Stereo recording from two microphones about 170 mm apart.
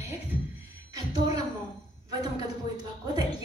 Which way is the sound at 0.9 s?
20° right (ahead or behind).